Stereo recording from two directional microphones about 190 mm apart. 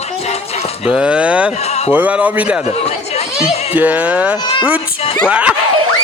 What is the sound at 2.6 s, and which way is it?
Speech, 35° left (ahead or behind).